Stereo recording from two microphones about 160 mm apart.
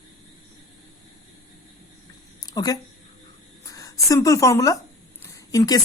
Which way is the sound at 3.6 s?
20° left (ahead or behind).